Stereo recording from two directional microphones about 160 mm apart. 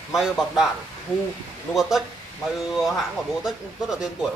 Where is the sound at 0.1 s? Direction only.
Centre (ahead or behind).